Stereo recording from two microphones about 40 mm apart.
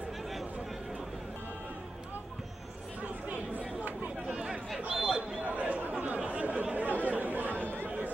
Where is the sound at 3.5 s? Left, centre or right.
Right.